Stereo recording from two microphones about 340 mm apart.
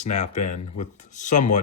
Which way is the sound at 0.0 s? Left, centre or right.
Left.